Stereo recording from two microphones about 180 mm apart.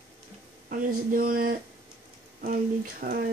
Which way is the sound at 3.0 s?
50° right (ahead or behind).